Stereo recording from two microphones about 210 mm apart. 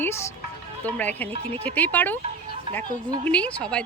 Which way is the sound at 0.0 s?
10° left (ahead or behind).